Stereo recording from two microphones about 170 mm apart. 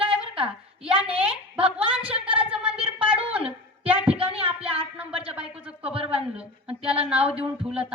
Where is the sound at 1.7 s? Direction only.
5° right (ahead or behind).